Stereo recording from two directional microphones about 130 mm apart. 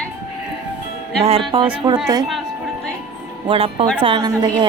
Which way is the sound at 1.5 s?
45° right (ahead or behind).